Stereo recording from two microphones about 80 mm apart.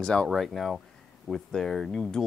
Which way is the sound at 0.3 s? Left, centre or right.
Centre.